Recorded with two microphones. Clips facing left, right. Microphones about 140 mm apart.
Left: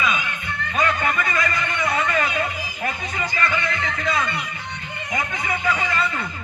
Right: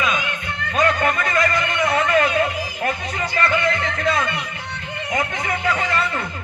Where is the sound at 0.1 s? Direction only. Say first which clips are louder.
Right 2 dB; 50° right (ahead or behind).